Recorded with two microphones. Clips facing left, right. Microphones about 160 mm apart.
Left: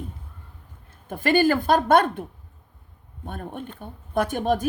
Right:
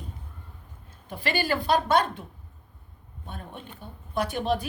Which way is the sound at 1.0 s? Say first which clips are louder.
Left 8 dB; 50° left (ahead or behind).